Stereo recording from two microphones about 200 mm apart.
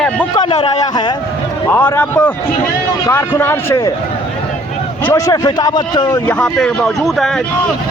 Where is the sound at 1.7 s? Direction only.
10° left (ahead or behind).